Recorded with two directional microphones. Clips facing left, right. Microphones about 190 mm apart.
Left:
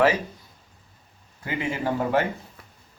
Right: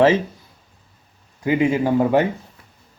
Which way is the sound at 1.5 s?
20° right (ahead or behind).